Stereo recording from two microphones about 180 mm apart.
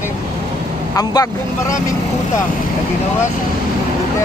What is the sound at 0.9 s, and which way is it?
Speech, 20° left (ahead or behind).